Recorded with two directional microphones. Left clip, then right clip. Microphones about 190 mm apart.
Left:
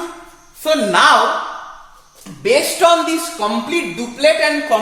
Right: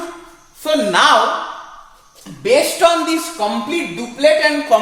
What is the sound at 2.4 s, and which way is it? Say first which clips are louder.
Speech: even; 25° right (ahead or behind).